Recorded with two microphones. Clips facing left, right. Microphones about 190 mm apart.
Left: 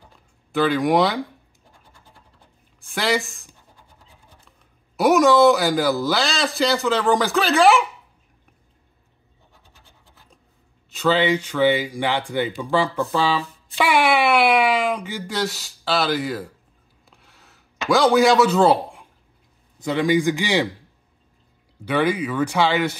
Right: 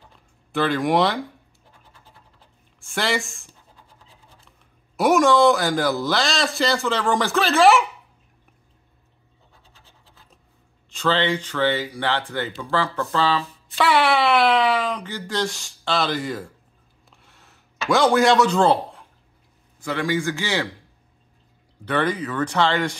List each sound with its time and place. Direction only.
0.5 s a man's voice: centre (ahead or behind)
2.8 s a man's voice: centre (ahead or behind)
4.9 s a man's voice: centre (ahead or behind)
10.9 s speech: 5° left (ahead or behind)
17.1 s a sound: centre (ahead or behind)
17.8 s a man's voice: centre (ahead or behind); by 20.7 s 15° left (ahead or behind)
21.8 s speech: 10° left (ahead or behind)